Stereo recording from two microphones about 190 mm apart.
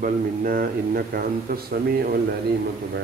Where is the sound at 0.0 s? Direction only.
50° right (ahead or behind).